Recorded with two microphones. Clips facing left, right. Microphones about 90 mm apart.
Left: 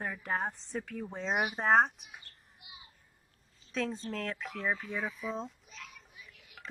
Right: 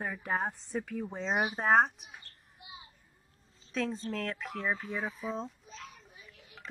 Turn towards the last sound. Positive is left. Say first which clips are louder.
# right 1 dB
turn(degrees=-35)  # may be behind; listen again after turning